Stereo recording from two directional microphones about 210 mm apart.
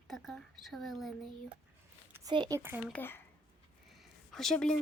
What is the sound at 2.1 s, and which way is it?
Speech, 15° right (ahead or behind).